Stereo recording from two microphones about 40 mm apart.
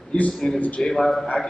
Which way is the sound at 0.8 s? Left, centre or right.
Centre.